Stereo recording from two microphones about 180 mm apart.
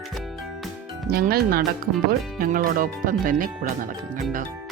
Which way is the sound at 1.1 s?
55° right (ahead or behind).